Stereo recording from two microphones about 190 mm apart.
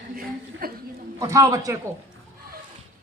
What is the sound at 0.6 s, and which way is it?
Speech, 50° right (ahead or behind).